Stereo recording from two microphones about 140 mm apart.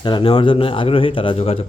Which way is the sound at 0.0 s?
35° left (ahead or behind).